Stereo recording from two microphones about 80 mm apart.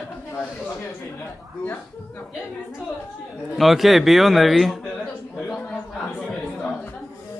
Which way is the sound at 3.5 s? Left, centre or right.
Centre.